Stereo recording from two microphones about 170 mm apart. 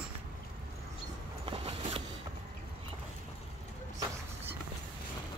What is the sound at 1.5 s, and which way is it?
Vehicle, 35° right (ahead or behind).